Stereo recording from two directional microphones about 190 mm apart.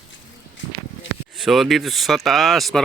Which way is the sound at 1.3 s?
Centre (ahead or behind).